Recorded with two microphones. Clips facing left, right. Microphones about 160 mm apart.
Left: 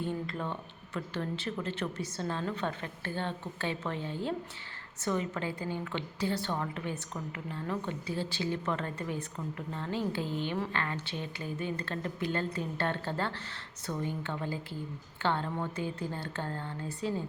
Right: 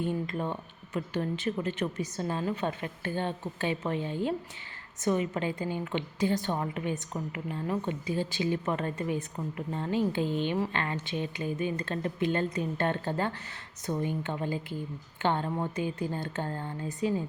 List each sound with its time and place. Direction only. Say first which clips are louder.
0.0 s a woman's voice: right 4 dB; 15° right (ahead or behind)